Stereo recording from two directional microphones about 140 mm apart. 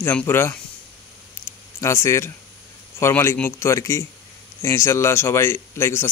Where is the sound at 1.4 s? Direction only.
20° left (ahead or behind).